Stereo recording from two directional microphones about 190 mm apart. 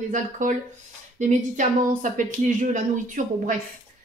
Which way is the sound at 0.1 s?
40° right (ahead or behind).